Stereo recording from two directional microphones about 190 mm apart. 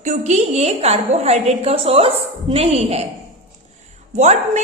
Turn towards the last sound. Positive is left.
turn(degrees=-35)  # may be behind; listen again after turning